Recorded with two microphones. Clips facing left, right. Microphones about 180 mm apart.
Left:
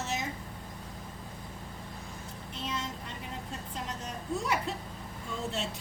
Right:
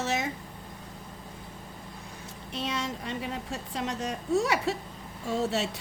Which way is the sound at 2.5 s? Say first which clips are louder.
Right 5 dB; 80° right.